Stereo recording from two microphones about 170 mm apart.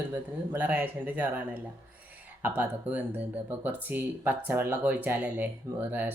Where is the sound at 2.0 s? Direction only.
10° right (ahead or behind).